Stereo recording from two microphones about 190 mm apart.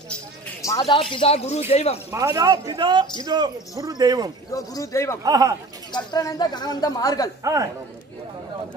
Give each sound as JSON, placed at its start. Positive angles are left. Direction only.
{"t": 0.6, "sound": "a man's voice", "side_deg": 20}
{"t": 2.0, "sound": "speech", "side_deg": -15}
{"t": 4.6, "sound": "speech", "side_deg": 15}
{"t": 5.2, "sound": "speech", "side_deg": -20}
{"t": 5.9, "sound": "speech", "side_deg": 20}